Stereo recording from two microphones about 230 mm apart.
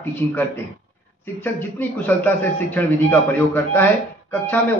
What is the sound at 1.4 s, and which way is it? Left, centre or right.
Speech, centre.